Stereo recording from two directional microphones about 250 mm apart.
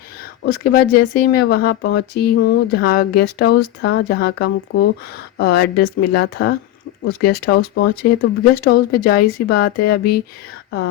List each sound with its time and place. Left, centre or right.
0.4 s speech: left